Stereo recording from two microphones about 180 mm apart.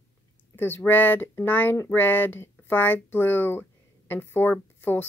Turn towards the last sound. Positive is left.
turn(degrees=10)  # may be behind; listen again after turning